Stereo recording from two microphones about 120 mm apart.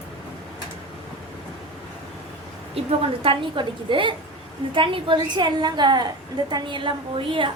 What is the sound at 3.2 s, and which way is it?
A woman's voice, 45° right (ahead or behind).